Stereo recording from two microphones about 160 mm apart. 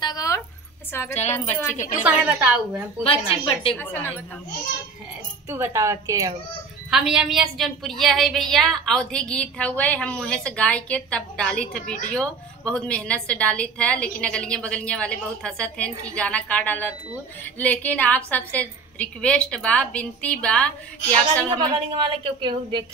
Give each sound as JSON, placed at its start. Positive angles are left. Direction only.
{"t": 0.0, "sound": "a sound", "side_deg": 25}
{"t": 1.1, "sound": "a woman's voice", "side_deg": 45}
{"t": 2.0, "sound": "a woman's voice", "side_deg": -10}
{"t": 3.0, "sound": "a woman's voice", "side_deg": 35}
{"t": 3.7, "sound": "a woman's voice", "side_deg": 10}
{"t": 5.5, "sound": "a woman's voice", "side_deg": -15}
{"t": 6.9, "sound": "a woman's voice", "side_deg": -5}
{"t": 21.5, "sound": "a woman's voice", "side_deg": -30}